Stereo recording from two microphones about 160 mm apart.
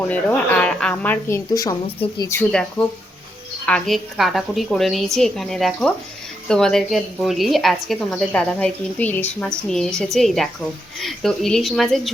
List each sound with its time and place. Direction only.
0.1 s speech: 10° left (ahead or behind)
2.0 s a woman's voice: 25° left (ahead or behind)
2.4 s a woman's voice: 5° left (ahead or behind)